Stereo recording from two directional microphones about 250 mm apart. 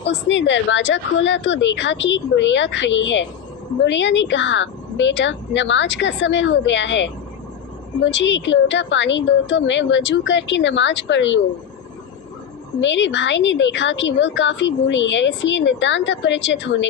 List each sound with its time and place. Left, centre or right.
0.0 s a woman's voice: left
8.1 s a woman's voice: left
12.8 s a woman's voice: left